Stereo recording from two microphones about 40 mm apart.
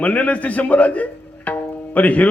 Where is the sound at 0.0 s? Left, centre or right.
Left.